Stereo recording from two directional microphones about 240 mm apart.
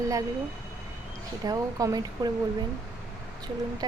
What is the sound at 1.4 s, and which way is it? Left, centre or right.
Speech, centre.